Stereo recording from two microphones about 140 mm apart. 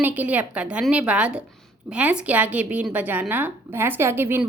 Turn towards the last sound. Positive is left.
turn(degrees=-15)  # may be behind; listen again after turning